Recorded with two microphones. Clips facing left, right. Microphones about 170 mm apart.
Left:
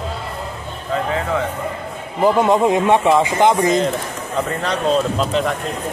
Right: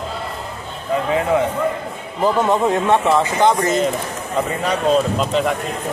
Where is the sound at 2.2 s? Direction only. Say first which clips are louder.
Left 2 dB; 15° left (ahead or behind).